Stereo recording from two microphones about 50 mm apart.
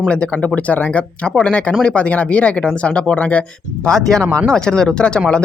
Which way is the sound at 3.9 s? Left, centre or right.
Centre.